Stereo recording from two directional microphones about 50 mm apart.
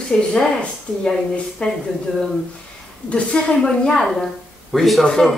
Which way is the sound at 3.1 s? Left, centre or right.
Left.